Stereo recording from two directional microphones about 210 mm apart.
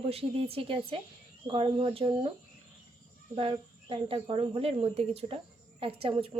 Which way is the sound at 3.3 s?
25° right (ahead or behind).